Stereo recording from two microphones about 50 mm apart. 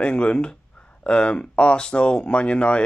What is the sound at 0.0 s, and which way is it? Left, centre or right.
Speech, left.